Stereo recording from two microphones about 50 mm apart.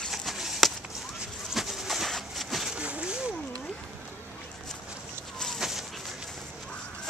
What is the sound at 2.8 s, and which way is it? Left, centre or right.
Splash, right.